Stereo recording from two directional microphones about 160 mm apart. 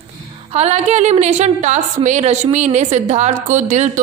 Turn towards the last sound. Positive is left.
turn(degrees=-50)  # may be behind; listen again after turning